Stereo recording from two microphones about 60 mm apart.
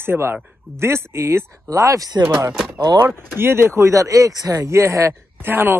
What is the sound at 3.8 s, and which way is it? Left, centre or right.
Speech, right.